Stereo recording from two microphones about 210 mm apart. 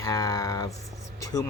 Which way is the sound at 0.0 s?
15° left (ahead or behind).